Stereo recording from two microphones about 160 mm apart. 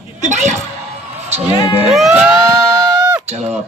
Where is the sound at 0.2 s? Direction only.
45° right (ahead or behind).